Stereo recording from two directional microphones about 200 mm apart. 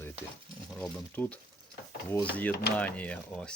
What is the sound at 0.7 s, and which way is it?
Speech, 5° left (ahead or behind).